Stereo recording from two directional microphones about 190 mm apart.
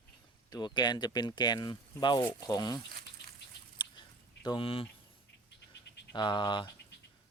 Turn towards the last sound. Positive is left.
turn(degrees=25)  # may be behind; listen again after turning